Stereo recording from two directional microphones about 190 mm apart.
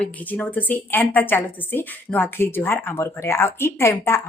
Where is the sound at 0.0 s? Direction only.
5° left (ahead or behind).